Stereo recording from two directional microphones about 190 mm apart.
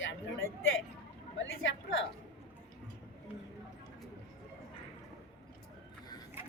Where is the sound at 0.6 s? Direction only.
90° left.